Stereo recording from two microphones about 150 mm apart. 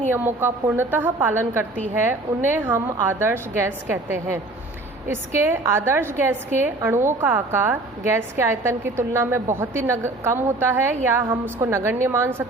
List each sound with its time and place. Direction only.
0.1 s a woman's voice: 15° right (ahead or behind)